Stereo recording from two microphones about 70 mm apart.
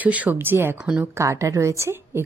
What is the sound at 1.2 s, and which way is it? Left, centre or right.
A woman's voice, right.